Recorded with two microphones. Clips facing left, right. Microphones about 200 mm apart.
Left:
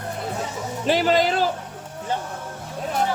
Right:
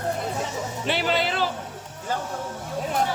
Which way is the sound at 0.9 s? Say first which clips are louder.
Left 6 dB; 40° left (ahead or behind).